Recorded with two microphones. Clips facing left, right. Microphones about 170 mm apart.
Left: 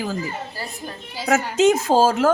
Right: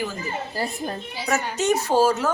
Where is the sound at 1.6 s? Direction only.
90° left.